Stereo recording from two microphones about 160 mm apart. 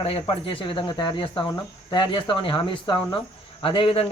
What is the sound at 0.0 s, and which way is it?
Speech, 35° left (ahead or behind).